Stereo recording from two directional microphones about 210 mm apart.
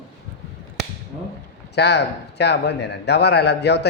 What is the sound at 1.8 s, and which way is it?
A man's voice, 55° left (ahead or behind).